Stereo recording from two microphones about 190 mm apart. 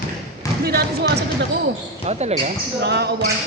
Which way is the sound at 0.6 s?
55° right (ahead or behind).